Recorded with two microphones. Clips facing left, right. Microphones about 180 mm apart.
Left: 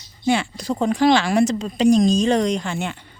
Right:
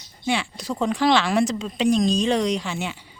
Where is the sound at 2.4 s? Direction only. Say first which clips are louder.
Left 2 dB; 50° left (ahead or behind).